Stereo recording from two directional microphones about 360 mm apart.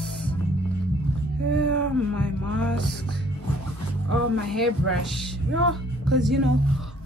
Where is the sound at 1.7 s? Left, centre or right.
Right.